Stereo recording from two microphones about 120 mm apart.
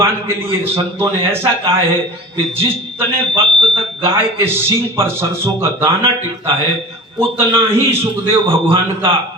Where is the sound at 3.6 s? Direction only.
45° right (ahead or behind).